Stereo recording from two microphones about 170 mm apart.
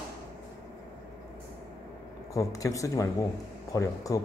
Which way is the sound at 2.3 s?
20° left (ahead or behind).